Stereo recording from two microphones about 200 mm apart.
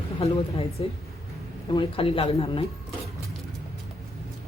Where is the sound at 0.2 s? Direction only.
30° left (ahead or behind).